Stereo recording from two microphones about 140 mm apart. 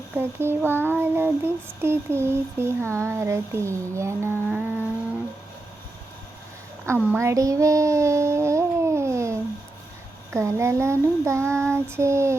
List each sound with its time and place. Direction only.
0.2 s child singing: 15° right (ahead or behind)
7.2 s child singing: 20° right (ahead or behind)